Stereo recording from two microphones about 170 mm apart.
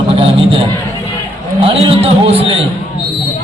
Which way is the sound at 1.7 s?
35° right (ahead or behind).